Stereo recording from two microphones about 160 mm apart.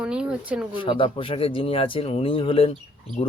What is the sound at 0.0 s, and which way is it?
Speech, 5° right (ahead or behind).